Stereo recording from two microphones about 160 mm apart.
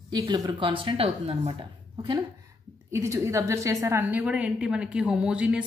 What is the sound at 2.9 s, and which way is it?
A woman's voice, 20° right (ahead or behind).